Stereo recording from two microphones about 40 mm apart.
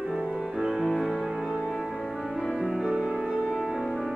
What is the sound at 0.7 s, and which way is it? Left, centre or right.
Music, centre.